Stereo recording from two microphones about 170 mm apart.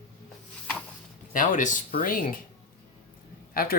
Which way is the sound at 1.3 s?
50° left (ahead or behind).